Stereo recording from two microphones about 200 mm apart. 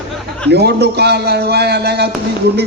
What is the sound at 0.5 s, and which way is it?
Speech, 55° right (ahead or behind).